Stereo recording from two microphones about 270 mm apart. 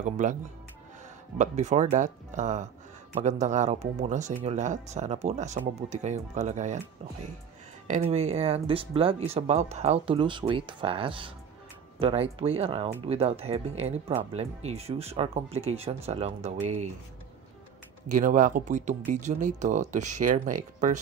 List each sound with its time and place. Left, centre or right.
0.0 s speech: right
1.4 s speech: right
7.9 s speech: right
18.0 s speech: right